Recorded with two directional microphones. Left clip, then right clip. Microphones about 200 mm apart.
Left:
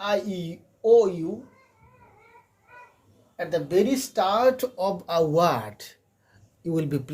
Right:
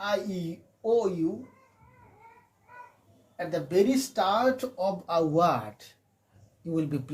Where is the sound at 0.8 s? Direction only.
45° left (ahead or behind).